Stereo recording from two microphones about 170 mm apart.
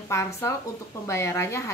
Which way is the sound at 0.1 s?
15° left (ahead or behind).